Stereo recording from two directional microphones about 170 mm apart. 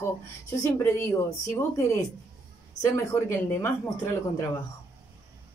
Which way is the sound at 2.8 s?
15° left (ahead or behind).